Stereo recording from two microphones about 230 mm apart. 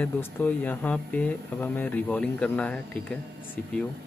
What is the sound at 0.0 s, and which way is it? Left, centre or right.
Speech, centre.